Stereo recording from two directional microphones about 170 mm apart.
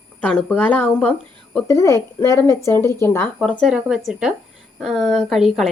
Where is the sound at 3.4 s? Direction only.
Centre (ahead or behind).